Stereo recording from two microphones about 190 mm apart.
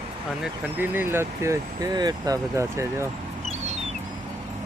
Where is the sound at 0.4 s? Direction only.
10° right (ahead or behind).